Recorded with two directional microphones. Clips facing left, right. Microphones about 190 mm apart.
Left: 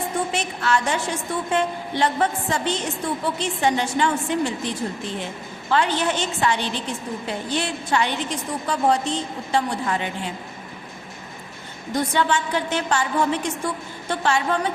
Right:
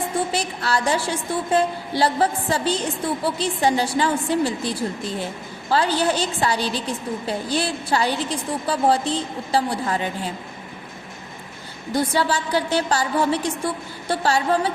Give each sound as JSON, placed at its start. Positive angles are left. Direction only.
{"t": 0.3, "sound": "a woman's voice", "side_deg": -35}
{"t": 11.9, "sound": "a woman's voice", "side_deg": -35}